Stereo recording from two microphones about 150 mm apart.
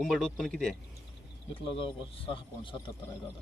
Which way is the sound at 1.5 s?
35° left (ahead or behind).